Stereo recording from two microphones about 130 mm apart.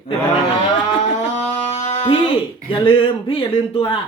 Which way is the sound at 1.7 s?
65° left (ahead or behind).